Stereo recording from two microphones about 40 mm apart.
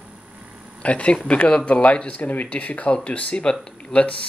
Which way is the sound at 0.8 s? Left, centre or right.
Left.